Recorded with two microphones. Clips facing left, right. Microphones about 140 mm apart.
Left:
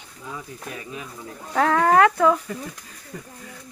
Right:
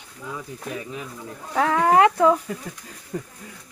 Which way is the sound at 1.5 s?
5° right (ahead or behind).